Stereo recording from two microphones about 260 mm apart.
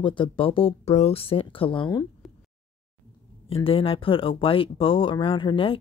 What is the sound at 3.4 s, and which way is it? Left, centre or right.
Speech, left.